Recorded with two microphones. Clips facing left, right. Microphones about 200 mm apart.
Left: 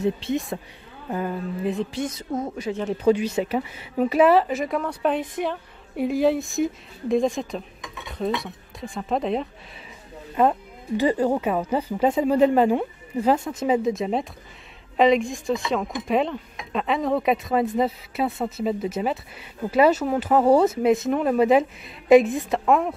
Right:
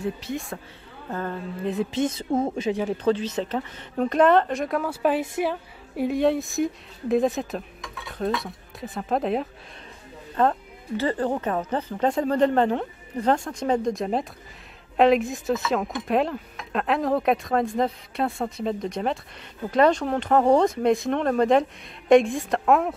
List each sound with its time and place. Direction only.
0.0 s a woman's voice: 20° left (ahead or behind)
1.1 s speech: 10° left (ahead or behind)
1.9 s speech: 25° right (ahead or behind)
3.0 s speech: 10° left (ahead or behind)
10.3 s speech: 15° left (ahead or behind)